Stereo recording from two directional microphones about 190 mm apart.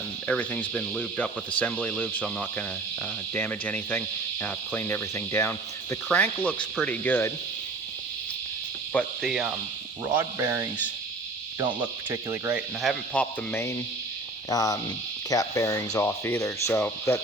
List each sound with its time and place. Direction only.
0.3 s speech: 5° left (ahead or behind)
8.9 s cricket: 5° left (ahead or behind)
10.2 s speech: 10° right (ahead or behind)
12.1 s speech: 15° right (ahead or behind)
12.8 s speech: 5° left (ahead or behind)